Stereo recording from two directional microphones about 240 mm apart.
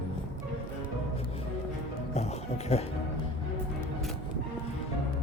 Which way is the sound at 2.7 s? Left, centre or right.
Left.